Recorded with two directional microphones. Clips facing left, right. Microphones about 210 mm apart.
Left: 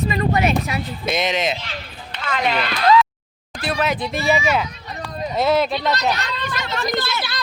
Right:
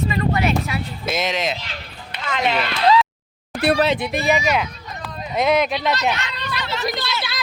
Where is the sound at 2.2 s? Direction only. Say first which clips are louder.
Even; 20° right (ahead or behind).